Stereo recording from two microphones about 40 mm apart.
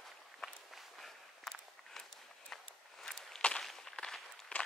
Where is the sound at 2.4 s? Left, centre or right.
Centre.